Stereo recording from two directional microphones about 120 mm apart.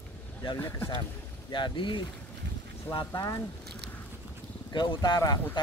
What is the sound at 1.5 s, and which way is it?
Speech, 45° left (ahead or behind).